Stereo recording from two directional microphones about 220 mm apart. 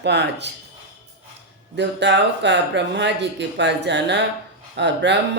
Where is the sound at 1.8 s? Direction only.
55° right (ahead or behind).